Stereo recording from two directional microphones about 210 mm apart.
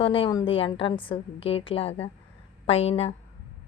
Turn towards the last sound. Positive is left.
turn(degrees=30)  # may be behind; listen again after turning